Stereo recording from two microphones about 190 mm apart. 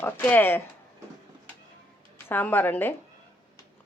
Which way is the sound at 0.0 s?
10° left (ahead or behind).